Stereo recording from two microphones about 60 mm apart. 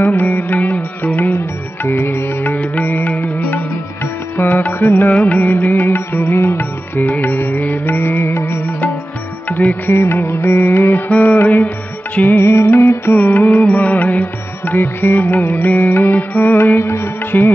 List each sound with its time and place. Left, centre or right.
0.0 s music: left
5.1 s music: left
5.9 s music: left
9.5 s music: left
9.9 s music: left
11.1 s music: left
11.3 s music: left
13.1 s music: left
13.7 s music: left